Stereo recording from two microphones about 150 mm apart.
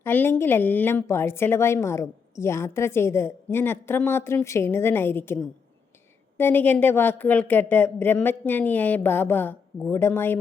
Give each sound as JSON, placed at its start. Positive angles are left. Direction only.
{"t": 0.0, "sound": "a woman's voice", "side_deg": 15}